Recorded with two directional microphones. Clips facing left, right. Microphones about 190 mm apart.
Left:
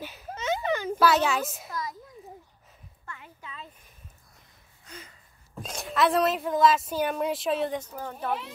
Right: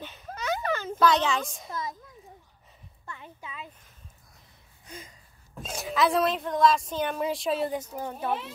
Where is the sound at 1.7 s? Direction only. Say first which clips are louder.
Right 3 dB; 20° right (ahead or behind).